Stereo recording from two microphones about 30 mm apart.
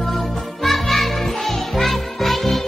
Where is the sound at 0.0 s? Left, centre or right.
Centre.